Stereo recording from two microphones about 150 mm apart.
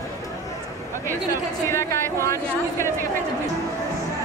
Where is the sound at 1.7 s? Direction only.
20° left (ahead or behind).